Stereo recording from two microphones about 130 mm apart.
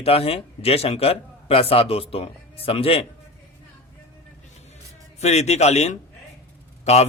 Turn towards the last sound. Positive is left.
turn(degrees=55)  # may be behind; listen again after turning